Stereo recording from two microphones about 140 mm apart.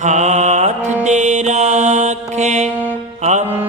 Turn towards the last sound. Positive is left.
turn(degrees=-15)  # may be behind; listen again after turning